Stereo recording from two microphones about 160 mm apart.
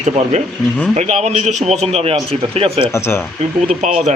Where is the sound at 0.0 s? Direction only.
40° right (ahead or behind).